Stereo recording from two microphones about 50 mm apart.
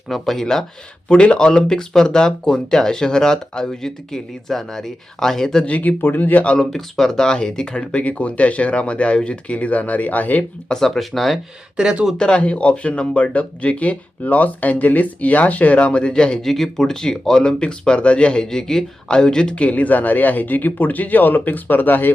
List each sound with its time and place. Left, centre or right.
0.1 s speech: centre
1.0 s speech: left
5.6 s speech: left
6.0 s speech: left
6.6 s speech: centre; by 10.4 s left
10.7 s speech: centre
11.8 s speech: centre
12.1 s speech: centre
16.4 s speech: centre; by 22.1 s left